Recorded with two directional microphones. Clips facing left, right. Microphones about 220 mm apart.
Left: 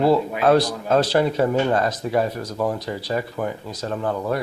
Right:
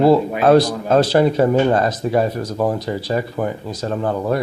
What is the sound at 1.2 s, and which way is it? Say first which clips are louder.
Speech: right 5 dB; 40° right (ahead or behind).